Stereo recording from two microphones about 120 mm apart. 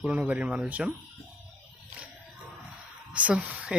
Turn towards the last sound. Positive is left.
turn(degrees=-10)  # may be behind; listen again after turning